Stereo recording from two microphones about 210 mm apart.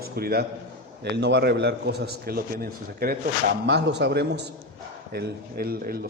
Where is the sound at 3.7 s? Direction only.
55° right (ahead or behind).